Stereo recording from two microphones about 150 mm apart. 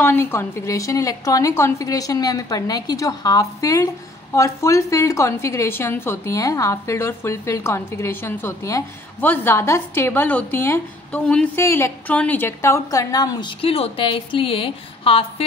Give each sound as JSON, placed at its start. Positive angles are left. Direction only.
{"t": 0.0, "sound": "a woman's voice", "side_deg": 15}
{"t": 11.5, "sound": "a woman's voice", "side_deg": 20}